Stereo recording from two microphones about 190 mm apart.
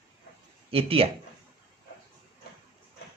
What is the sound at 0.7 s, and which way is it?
Speech, 30° right (ahead or behind).